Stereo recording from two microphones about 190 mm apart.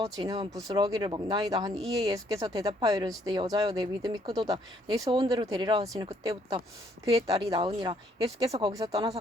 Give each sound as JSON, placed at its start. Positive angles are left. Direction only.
{"t": 0.0, "sound": "speech", "side_deg": -20}